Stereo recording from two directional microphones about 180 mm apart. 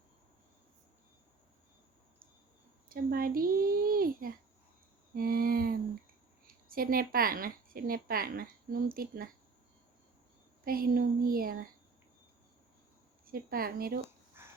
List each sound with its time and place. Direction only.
2.9 s a woman's voice: 55° right (ahead or behind)
10.7 s speech: 55° right (ahead or behind)
13.2 s speech: 55° right (ahead or behind)
14.4 s a sound: 10° right (ahead or behind)